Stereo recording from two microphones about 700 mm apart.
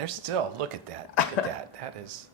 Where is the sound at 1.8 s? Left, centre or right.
Right.